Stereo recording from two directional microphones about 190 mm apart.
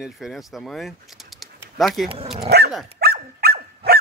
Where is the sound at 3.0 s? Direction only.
55° right (ahead or behind).